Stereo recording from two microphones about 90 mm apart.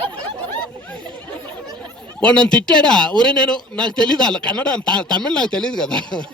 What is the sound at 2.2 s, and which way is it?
A man's voice, 10° left (ahead or behind).